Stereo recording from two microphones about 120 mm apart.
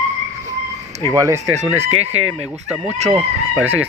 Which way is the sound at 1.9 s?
55° right (ahead or behind).